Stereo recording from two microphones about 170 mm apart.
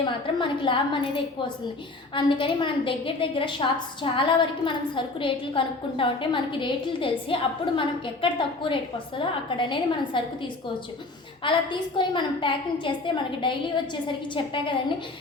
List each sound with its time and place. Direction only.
0.0 s a woman's voice: 30° left (ahead or behind)